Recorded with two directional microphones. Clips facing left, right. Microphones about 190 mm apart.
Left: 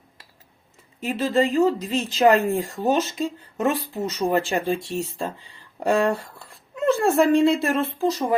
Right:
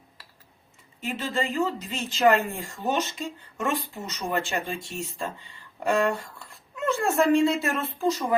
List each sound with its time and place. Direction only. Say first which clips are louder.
1.0 s speech: left 8 dB; 35° left (ahead or behind)